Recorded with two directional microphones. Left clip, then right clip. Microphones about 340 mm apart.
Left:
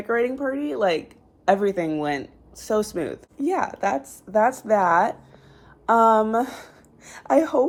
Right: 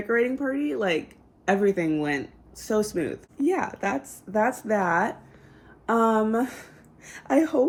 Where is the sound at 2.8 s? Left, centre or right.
Left.